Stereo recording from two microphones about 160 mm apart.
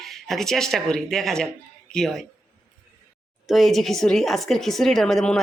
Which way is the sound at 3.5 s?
Centre (ahead or behind).